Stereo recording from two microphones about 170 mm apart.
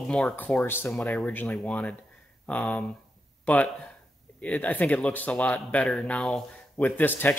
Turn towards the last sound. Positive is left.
turn(degrees=10)  # may be behind; listen again after turning